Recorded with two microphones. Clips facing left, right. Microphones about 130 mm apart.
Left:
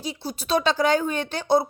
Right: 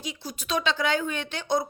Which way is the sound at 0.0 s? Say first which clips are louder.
Left 5 dB; 35° left (ahead or behind).